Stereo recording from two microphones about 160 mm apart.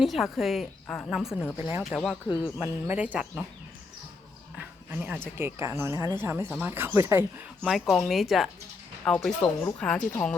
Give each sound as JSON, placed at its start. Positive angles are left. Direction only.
{"t": 0.0, "sound": "a woman's voice", "side_deg": 0}
{"t": 1.5, "sound": "speech", "side_deg": -15}
{"t": 2.2, "sound": "speech", "side_deg": 30}
{"t": 2.6, "sound": "speech", "side_deg": -10}
{"t": 4.5, "sound": "a sound", "side_deg": -10}
{"t": 5.4, "sound": "speech", "side_deg": -15}
{"t": 7.6, "sound": "a woman's voice", "side_deg": 0}